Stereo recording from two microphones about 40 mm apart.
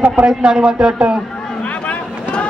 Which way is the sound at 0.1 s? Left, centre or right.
Right.